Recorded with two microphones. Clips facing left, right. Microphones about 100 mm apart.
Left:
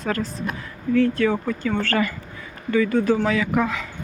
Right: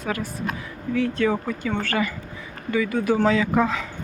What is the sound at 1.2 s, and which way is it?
Speech, 20° right (ahead or behind).